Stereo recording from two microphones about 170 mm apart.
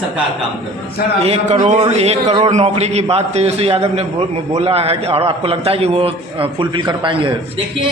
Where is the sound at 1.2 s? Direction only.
40° right (ahead or behind).